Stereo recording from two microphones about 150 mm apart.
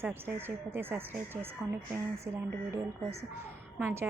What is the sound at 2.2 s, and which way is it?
Speech, 20° right (ahead or behind).